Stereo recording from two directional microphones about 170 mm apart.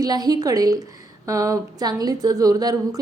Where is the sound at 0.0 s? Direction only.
25° right (ahead or behind).